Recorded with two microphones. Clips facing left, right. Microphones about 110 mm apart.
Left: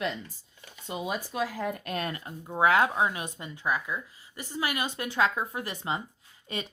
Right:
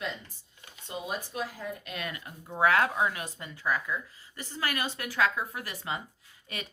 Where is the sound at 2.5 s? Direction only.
20° left (ahead or behind).